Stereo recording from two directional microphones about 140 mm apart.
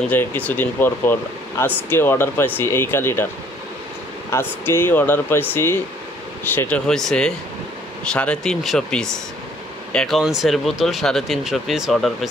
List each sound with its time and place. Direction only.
0.0 s speech: 15° left (ahead or behind)
4.3 s speech: 15° left (ahead or behind)
6.9 s speech: 5° left (ahead or behind)